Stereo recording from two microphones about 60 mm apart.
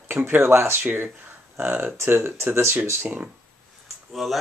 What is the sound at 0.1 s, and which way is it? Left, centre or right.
Speech, right.